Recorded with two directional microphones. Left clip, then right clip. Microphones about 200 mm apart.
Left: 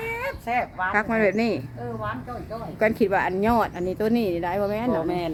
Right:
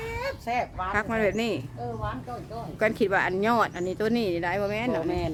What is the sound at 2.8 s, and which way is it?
Speech, 10° left (ahead or behind).